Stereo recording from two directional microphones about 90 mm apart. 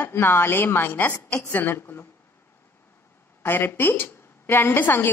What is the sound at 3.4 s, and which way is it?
A woman's voice, 25° left (ahead or behind).